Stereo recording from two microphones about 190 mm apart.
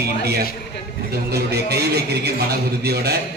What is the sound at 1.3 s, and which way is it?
A man's voice, 60° right (ahead or behind).